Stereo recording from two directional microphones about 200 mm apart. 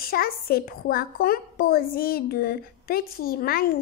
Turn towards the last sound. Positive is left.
turn(degrees=50)  # may be behind; listen again after turning